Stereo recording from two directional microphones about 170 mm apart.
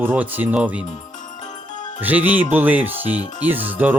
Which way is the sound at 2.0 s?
10° right (ahead or behind).